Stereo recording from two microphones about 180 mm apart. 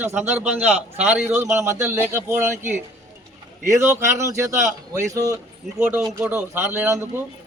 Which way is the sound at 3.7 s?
15° right (ahead or behind).